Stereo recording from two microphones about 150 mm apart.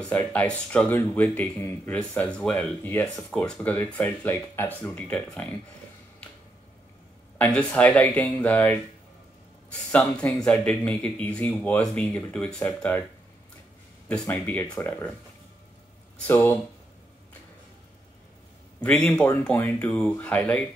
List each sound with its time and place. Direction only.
0.0 s speech: 10° left (ahead or behind)
7.3 s speech: 10° left (ahead or behind)
14.0 s speech: 10° left (ahead or behind)
16.3 s speech: 15° left (ahead or behind)
18.8 s speech: 5° left (ahead or behind)